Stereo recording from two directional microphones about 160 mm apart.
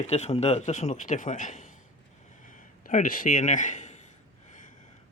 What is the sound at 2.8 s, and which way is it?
A man's voice, 55° left (ahead or behind).